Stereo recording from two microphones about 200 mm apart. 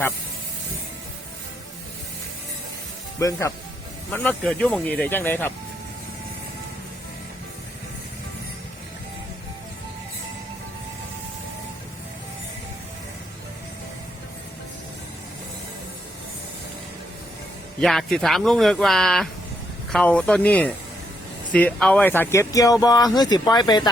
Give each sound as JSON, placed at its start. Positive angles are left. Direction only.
{"t": 3.2, "sound": "speech", "side_deg": 15}
{"t": 17.7, "sound": "speech", "side_deg": 0}